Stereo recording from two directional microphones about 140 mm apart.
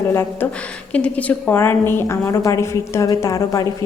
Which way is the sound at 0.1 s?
20° left (ahead or behind).